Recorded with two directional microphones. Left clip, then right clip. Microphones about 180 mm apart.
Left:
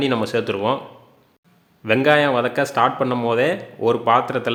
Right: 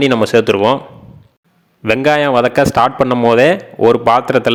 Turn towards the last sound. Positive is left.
turn(degrees=-45)  # may be behind; listen again after turning